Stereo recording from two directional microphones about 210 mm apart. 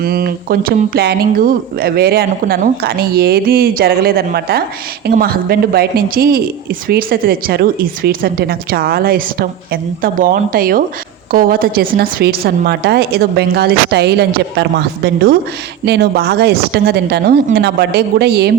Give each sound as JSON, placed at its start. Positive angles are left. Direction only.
{"t": 0.0, "sound": "speech", "side_deg": -45}